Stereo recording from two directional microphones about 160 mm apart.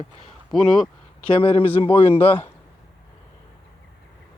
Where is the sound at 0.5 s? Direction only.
5° left (ahead or behind).